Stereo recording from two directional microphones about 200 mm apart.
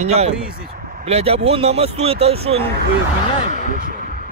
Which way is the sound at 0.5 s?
45° right (ahead or behind).